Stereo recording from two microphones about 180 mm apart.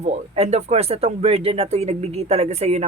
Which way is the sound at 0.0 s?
40° right (ahead or behind).